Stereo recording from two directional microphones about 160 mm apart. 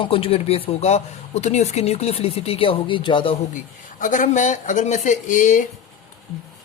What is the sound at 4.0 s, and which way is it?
Speech, 55° left (ahead or behind).